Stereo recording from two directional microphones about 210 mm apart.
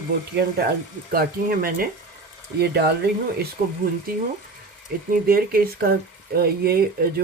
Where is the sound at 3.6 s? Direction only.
40° right (ahead or behind).